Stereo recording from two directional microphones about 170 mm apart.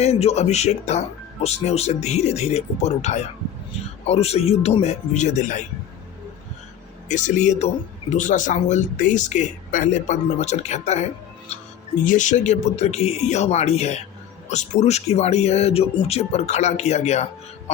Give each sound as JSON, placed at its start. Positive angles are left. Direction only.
{"t": 0.0, "sound": "speech", "side_deg": 40}
{"t": 7.1, "sound": "speech", "side_deg": 45}